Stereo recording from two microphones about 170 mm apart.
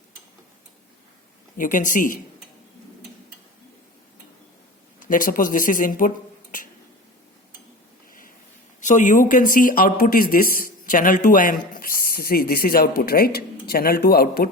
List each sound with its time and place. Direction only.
1.5 s speech: 50° left (ahead or behind)
4.9 s speech: 55° left (ahead or behind)
8.8 s speech: 45° left (ahead or behind); by 14.4 s 65° left (ahead or behind)